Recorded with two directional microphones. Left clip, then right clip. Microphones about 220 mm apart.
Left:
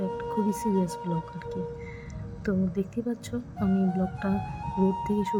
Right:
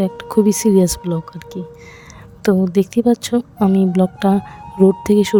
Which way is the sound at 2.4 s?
50° right (ahead or behind).